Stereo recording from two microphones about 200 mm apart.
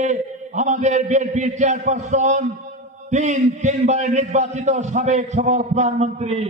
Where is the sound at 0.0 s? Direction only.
35° right (ahead or behind).